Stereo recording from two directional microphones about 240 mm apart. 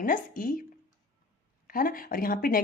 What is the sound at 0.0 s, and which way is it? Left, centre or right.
Speech, left.